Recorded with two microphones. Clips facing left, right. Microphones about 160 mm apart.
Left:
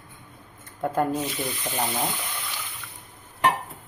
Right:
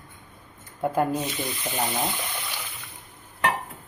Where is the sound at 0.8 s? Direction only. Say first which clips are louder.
Right 1 dB; 5° right (ahead or behind).